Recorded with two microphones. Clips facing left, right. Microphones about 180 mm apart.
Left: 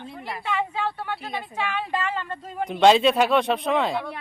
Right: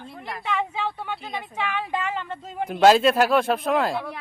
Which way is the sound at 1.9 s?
15° right (ahead or behind).